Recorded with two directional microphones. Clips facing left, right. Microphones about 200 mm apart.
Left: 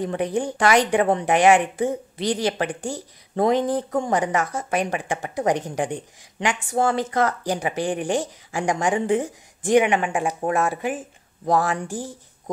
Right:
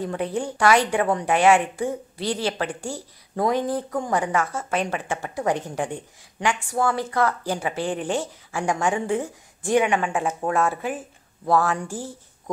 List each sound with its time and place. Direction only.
0.0 s speech: 15° left (ahead or behind)